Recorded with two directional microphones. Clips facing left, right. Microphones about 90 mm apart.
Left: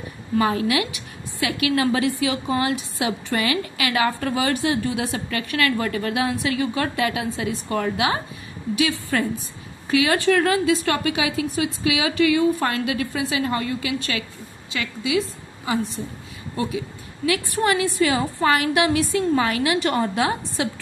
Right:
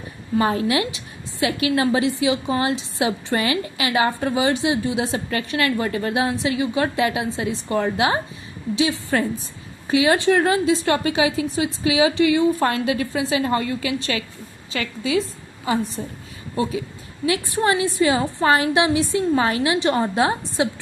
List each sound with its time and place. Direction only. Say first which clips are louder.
0.4 s a woman's voice: right 1 dB; 30° right (ahead or behind)
17.3 s a woman's voice: right 1 dB; 30° right (ahead or behind)